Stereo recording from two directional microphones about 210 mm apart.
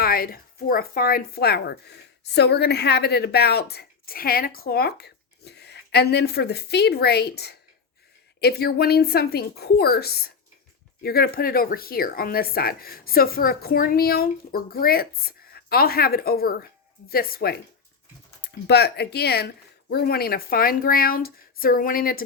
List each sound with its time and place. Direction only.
0.0 s a woman's voice: 45° left (ahead or behind)